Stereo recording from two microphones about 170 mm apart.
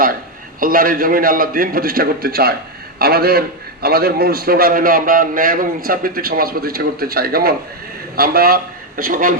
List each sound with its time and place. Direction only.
0.6 s a man's voice: 55° right (ahead or behind)